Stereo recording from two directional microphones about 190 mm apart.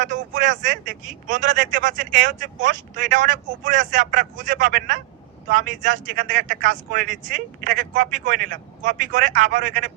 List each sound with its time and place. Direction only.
0.0 s speech: 40° right (ahead or behind)